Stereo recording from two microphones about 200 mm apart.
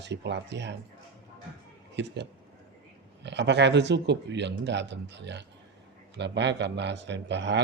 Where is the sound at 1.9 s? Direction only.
60° right (ahead or behind).